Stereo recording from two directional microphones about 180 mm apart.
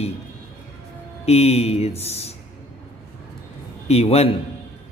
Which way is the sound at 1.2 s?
35° left (ahead or behind).